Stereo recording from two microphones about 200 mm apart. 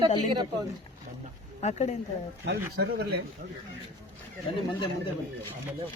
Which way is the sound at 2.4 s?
55° right (ahead or behind).